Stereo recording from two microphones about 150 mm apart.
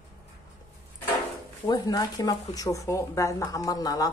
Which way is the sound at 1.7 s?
25° left (ahead or behind).